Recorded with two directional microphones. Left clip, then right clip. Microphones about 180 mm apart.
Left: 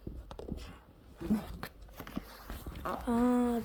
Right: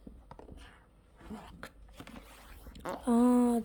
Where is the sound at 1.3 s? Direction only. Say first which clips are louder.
Left 4 dB; 20° left (ahead or behind).